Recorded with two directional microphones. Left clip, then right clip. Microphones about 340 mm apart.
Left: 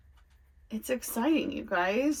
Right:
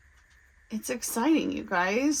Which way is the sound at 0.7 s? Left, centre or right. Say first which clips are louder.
Even; centre.